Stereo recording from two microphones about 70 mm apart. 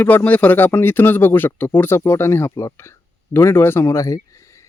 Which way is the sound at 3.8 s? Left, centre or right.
Left.